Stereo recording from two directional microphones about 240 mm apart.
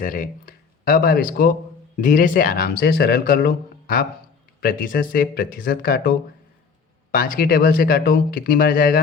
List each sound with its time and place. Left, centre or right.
0.0 s speech: left